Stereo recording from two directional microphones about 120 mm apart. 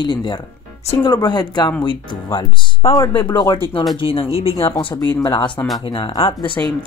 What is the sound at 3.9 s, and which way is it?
Speech, 50° left (ahead or behind).